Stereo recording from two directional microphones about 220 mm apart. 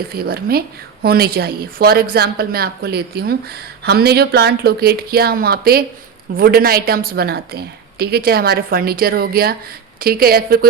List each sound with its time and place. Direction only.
0.1 s a woman's voice: 45° right (ahead or behind)